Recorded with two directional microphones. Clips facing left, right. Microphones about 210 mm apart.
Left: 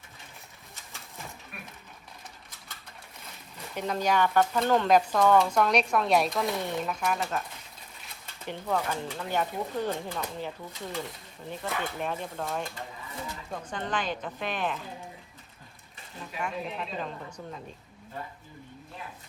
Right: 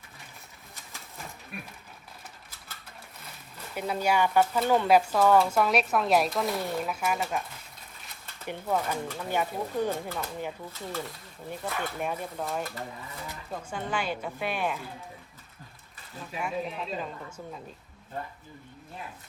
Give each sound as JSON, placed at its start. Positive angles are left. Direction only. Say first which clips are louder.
{"t": 3.8, "sound": "speech", "louder": "even", "side_deg": -10}
{"t": 8.4, "sound": "speech", "louder": "right 1 dB", "side_deg": -10}
{"t": 10.7, "sound": "speech", "louder": "even", "side_deg": 15}
{"t": 11.6, "sound": "speech", "louder": "even", "side_deg": -10}
{"t": 16.4, "sound": "speech", "louder": "right 1 dB", "side_deg": -5}